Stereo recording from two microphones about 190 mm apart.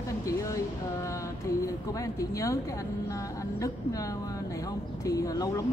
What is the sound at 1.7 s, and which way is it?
Speech, 15° left (ahead or behind).